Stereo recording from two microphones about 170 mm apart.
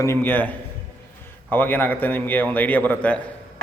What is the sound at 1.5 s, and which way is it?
A man's voice, 10° left (ahead or behind).